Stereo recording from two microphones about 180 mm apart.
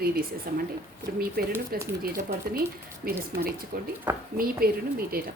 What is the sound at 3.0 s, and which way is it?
A woman's voice, 55° right (ahead or behind).